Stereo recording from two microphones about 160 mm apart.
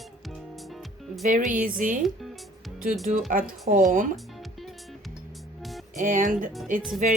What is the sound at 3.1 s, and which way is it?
Speech, 60° right (ahead or behind).